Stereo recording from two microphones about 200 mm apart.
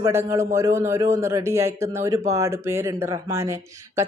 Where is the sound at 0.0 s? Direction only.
15° right (ahead or behind).